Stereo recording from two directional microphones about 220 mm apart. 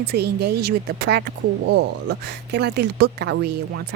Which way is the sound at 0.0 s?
45° right (ahead or behind).